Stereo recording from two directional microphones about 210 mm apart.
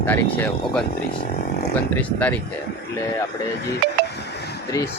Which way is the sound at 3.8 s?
50° right (ahead or behind).